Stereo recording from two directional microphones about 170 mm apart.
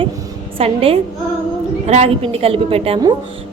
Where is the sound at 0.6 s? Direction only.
35° right (ahead or behind).